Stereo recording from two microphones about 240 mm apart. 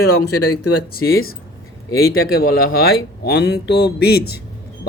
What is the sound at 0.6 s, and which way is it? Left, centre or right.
Speech, left.